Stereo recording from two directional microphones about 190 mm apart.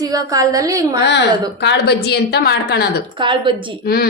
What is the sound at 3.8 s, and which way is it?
Speech, 55° left (ahead or behind).